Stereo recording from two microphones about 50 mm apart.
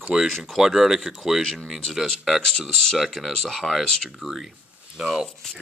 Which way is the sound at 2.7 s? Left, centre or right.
Centre.